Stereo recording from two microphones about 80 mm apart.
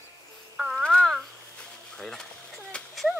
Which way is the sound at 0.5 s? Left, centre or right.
Centre.